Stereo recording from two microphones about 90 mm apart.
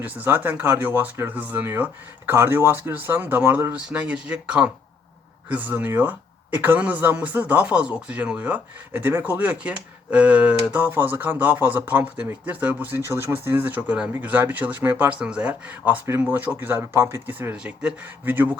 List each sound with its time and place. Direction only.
0.0 s speech: 20° right (ahead or behind)
16.0 s speech: 25° right (ahead or behind)
17.5 s speech: 10° right (ahead or behind)